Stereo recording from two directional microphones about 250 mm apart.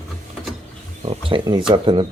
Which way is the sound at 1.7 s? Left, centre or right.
Centre.